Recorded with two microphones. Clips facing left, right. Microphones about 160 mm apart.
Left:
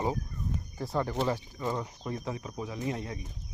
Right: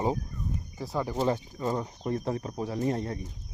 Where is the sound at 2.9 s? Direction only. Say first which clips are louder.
Right 3 dB; 45° right (ahead or behind).